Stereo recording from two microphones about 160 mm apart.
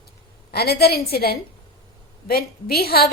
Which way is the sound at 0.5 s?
80° left.